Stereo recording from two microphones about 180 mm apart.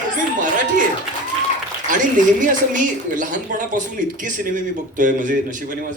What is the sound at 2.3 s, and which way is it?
Speech, 45° right (ahead or behind).